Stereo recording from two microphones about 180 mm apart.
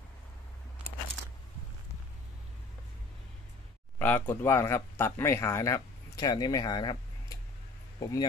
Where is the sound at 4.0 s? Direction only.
10° left (ahead or behind).